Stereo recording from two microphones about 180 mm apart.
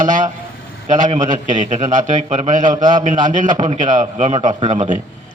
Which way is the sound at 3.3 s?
45° right (ahead or behind).